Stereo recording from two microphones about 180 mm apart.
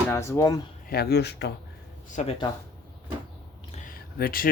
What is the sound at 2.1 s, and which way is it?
Speech, 40° left (ahead or behind).